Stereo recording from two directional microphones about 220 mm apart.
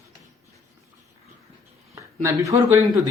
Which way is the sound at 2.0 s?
15° right (ahead or behind).